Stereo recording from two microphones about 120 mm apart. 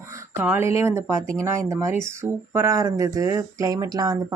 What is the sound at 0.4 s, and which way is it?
Speech, 20° right (ahead or behind).